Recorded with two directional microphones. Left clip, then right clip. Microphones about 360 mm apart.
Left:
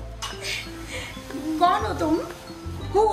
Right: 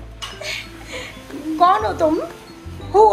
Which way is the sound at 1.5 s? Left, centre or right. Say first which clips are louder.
Right 6 dB; centre.